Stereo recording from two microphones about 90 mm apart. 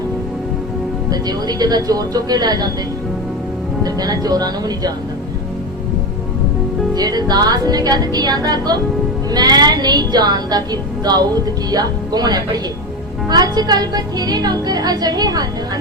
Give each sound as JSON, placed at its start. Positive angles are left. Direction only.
{"t": 1.1, "sound": "a woman's voice", "side_deg": -50}
{"t": 3.8, "sound": "a woman's voice", "side_deg": -45}
{"t": 6.9, "sound": "a woman's voice", "side_deg": -50}